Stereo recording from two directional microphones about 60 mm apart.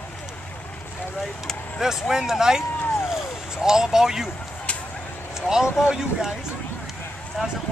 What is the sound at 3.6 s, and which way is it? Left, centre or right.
Speech, centre.